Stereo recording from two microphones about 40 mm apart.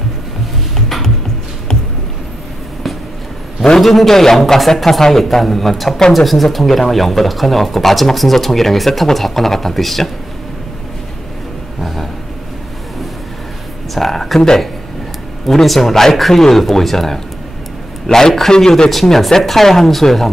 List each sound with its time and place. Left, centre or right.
0.7 s music: centre
3.7 s speech: centre
11.8 s a sound: centre
13.9 s speech: centre
15.4 s speech: centre
18.9 s speech: centre